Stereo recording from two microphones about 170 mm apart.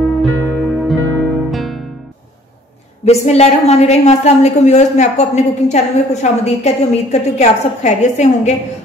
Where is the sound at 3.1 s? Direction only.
40° left (ahead or behind).